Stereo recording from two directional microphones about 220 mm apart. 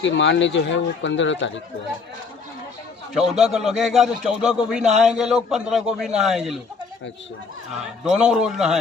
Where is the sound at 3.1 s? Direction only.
Centre (ahead or behind).